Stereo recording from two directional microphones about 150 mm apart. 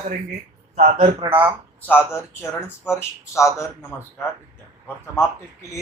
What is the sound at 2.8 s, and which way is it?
Speech, 5° right (ahead or behind).